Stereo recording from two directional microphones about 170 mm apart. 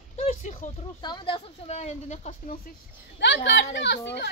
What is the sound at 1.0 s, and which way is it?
Speech, 25° left (ahead or behind).